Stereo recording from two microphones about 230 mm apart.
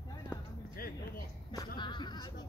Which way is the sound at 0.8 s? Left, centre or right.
Left.